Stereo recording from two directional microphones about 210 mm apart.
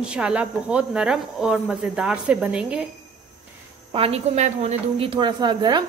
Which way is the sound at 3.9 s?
30° right (ahead or behind).